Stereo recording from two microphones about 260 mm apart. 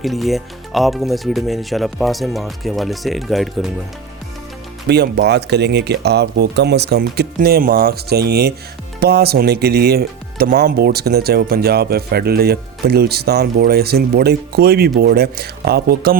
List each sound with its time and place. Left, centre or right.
0.0 s speech: centre
4.9 s speech: right